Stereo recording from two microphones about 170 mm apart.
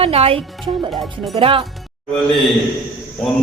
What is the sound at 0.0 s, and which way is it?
Speech, 35° right (ahead or behind).